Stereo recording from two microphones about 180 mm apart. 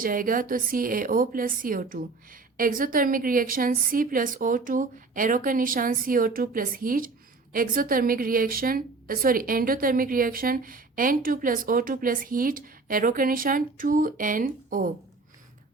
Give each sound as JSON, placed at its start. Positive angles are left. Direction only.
{"t": 0.0, "sound": "a woman's voice", "side_deg": -50}